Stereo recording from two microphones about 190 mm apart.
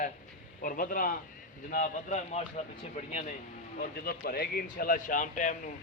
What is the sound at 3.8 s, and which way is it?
Speech, 50° left (ahead or behind).